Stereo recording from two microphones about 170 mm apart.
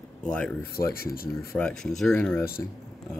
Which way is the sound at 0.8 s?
60° left (ahead or behind).